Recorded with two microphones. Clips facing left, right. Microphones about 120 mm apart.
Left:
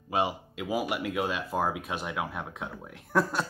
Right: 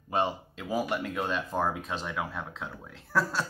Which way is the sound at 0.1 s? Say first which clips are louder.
Even; 10° left (ahead or behind).